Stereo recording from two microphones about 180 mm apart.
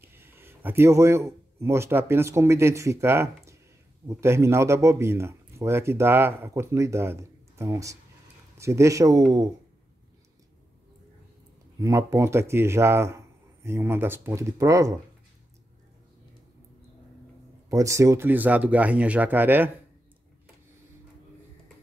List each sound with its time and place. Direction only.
0.0 s speech: 10° right (ahead or behind)
11.8 s speech: 15° right (ahead or behind)
17.6 s speech: 15° right (ahead or behind)